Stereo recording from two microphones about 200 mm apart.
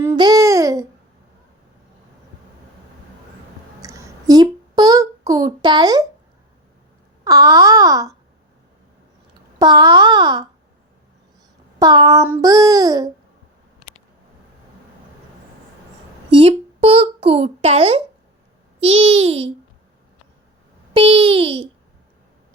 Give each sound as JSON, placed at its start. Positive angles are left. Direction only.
{"t": 0.0, "sound": "speech", "side_deg": -15}
{"t": 3.8, "sound": "a sound", "side_deg": -15}
{"t": 7.3, "sound": "babbling", "side_deg": -15}
{"t": 9.6, "sound": "speech", "side_deg": -20}
{"t": 11.8, "sound": "speech", "side_deg": -20}
{"t": 12.3, "sound": "babbling", "side_deg": -15}
{"t": 16.4, "sound": "a child's voice", "side_deg": -25}
{"t": 20.9, "sound": "speech", "side_deg": -25}